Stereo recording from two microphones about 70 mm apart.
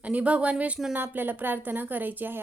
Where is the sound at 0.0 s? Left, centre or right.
Right.